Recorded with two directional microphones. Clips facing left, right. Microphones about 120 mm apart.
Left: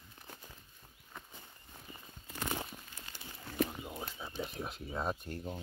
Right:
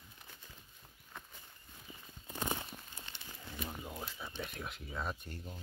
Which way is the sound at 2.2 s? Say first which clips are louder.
Right 1 dB; 15° right (ahead or behind).